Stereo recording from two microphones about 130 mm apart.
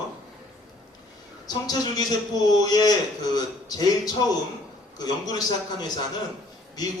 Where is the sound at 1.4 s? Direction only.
30° left (ahead or behind).